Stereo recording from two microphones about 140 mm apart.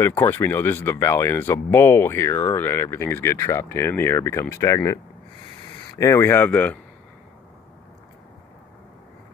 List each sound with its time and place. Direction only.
0.0 s speech: 20° left (ahead or behind)